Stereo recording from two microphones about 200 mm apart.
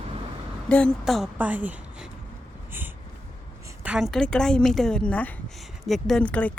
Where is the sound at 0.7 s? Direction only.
5° left (ahead or behind).